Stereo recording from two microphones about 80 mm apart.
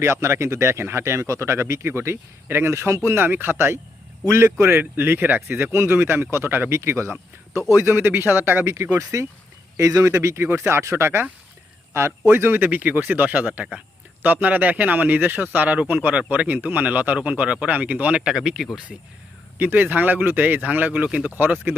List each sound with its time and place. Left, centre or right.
0.0 s speech: right; by 18.9 s centre
19.5 s speech: right